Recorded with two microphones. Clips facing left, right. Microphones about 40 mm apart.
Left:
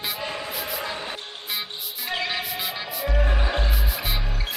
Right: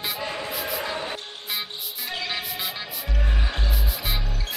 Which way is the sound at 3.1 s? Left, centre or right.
Left.